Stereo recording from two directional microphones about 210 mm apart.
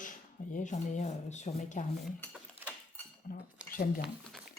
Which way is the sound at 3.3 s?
45° left (ahead or behind).